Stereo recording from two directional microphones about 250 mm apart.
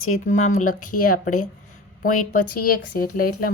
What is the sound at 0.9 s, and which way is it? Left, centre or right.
A woman's voice, left.